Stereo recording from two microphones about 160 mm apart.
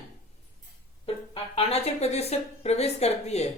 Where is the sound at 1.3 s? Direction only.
35° left (ahead or behind).